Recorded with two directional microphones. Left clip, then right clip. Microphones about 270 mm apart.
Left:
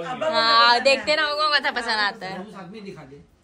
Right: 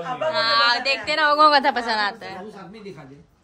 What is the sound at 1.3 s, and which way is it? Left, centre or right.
A woman's voice, right.